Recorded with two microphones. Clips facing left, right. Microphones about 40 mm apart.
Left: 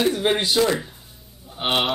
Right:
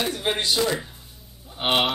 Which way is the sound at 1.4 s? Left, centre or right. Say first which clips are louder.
Even; centre.